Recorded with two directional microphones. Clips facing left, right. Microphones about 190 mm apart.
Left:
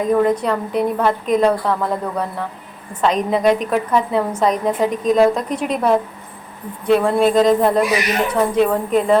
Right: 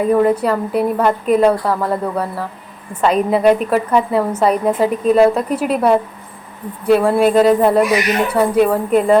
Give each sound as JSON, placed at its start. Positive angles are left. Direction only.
{"t": 0.0, "sound": "a woman's voice", "side_deg": -10}